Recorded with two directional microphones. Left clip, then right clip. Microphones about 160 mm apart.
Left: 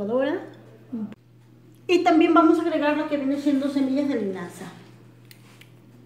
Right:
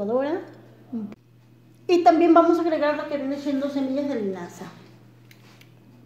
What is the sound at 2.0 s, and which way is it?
Speech, 30° right (ahead or behind).